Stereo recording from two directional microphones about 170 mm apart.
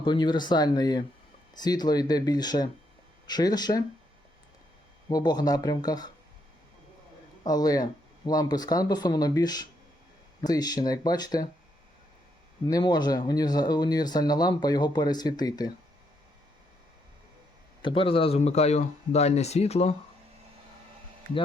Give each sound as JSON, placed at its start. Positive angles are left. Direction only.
{"t": 0.0, "sound": "speech", "side_deg": 25}
{"t": 5.0, "sound": "speech", "side_deg": 25}
{"t": 7.4, "sound": "speech", "side_deg": 20}
{"t": 12.6, "sound": "speech", "side_deg": 25}
{"t": 17.8, "sound": "speech", "side_deg": 30}